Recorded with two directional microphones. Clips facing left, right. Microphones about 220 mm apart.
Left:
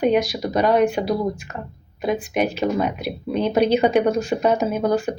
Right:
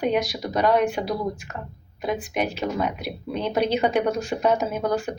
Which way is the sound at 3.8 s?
10° left (ahead or behind).